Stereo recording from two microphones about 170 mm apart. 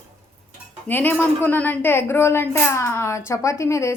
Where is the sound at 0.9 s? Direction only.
10° left (ahead or behind).